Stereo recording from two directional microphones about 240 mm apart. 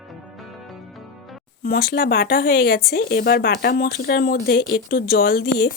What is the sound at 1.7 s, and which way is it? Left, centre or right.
Speech, left.